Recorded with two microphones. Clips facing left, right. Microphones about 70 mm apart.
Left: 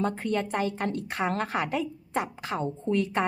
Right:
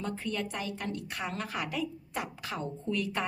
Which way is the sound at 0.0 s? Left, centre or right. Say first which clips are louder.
Left 7 dB; left.